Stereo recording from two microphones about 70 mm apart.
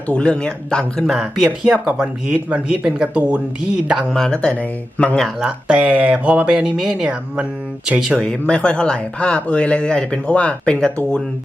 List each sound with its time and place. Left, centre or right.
0.1 s speech: centre
1.0 s speech: centre
1.5 s speech: centre
4.1 s speech: centre
4.4 s speech: left
5.4 s speech: centre
8.4 s speech: centre